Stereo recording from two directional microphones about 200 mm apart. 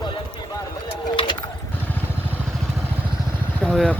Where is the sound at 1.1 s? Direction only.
25° left (ahead or behind).